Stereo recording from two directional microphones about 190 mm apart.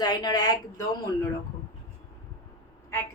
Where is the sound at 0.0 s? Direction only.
20° left (ahead or behind).